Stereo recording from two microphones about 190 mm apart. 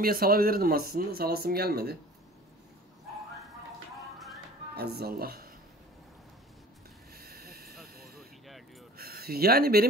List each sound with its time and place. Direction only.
0.0 s speech: 50° right (ahead or behind)
4.7 s speech: 55° right (ahead or behind)
7.2 s a sound: 50° right (ahead or behind)